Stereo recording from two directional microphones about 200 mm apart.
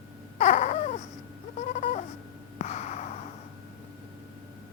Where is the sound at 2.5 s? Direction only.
35° left (ahead or behind).